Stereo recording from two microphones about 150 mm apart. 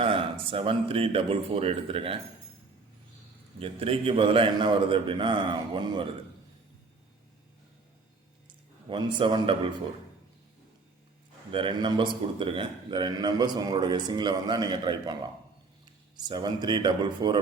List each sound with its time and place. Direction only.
0.0 s a man's voice: 35° right (ahead or behind)
3.6 s a man's voice: 40° right (ahead or behind)
8.4 s a man's voice: 30° right (ahead or behind)
11.5 s a man's voice: 35° right (ahead or behind)
16.3 s a man's voice: 30° right (ahead or behind)